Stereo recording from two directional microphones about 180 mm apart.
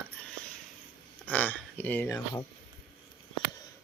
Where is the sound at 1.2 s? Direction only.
10° left (ahead or behind).